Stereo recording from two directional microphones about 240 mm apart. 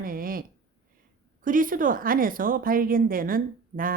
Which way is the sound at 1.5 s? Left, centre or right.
Right.